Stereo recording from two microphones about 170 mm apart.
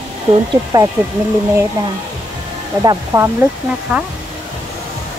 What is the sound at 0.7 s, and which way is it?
Speech, 20° right (ahead or behind).